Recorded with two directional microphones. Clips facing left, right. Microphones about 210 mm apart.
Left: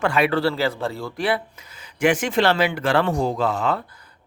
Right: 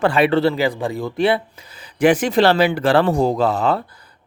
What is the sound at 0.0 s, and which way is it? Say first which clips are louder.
Speech: right 4 dB; 30° right (ahead or behind).